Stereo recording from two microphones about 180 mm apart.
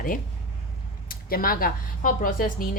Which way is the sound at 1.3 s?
55° left (ahead or behind).